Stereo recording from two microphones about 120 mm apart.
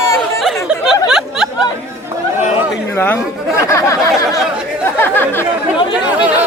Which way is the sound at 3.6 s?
25° left (ahead or behind).